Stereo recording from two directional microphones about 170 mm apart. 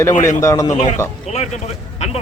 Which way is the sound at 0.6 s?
45° left (ahead or behind).